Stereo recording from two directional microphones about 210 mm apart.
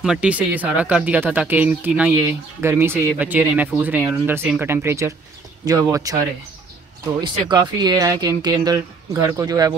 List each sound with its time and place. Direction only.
0.0 s speech: 5° right (ahead or behind)
7.2 s speech: 20° right (ahead or behind)